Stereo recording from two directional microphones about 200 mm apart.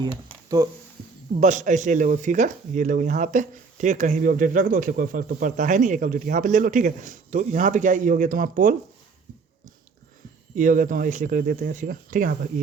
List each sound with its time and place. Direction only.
0.0 s speech: 20° right (ahead or behind)
1.4 s speech: 40° right (ahead or behind)
10.5 s speech: 40° right (ahead or behind)